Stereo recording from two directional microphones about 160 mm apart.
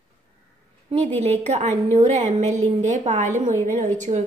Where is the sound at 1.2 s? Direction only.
45° right (ahead or behind).